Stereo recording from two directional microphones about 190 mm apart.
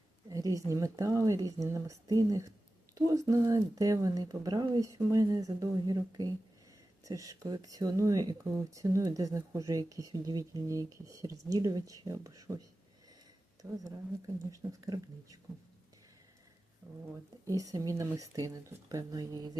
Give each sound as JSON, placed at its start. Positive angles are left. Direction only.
{"t": 0.3, "sound": "speech", "side_deg": -20}
{"t": 13.6, "sound": "speech", "side_deg": -20}
{"t": 17.4, "sound": "speech", "side_deg": -20}